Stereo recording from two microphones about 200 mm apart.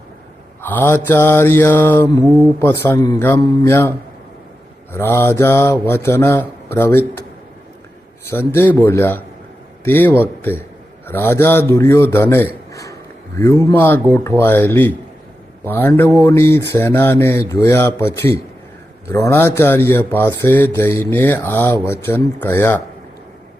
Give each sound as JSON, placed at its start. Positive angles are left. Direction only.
{"t": 0.6, "sound": "speech", "side_deg": 10}
{"t": 8.3, "sound": "speech", "side_deg": 10}
{"t": 12.7, "sound": "a sound", "side_deg": 15}
{"t": 13.7, "sound": "speech", "side_deg": 10}